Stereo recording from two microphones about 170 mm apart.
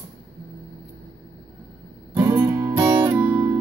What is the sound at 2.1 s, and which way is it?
Music, 15° right (ahead or behind).